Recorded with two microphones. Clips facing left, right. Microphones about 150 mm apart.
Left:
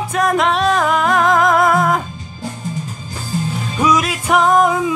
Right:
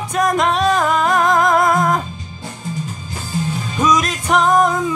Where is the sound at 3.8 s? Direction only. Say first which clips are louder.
Left 1 dB; 5° left (ahead or behind).